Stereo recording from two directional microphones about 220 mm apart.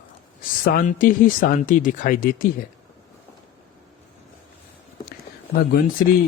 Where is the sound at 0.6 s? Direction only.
40° left (ahead or behind).